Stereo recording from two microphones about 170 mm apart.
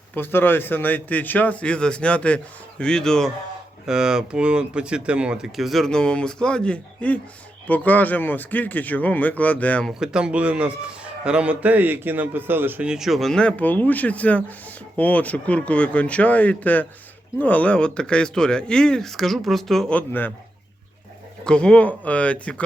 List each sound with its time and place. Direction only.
0.1 s a man's voice: 10° left (ahead or behind)
10.0 s a man's voice: 5° right (ahead or behind)
21.4 s a man's voice: 5° left (ahead or behind)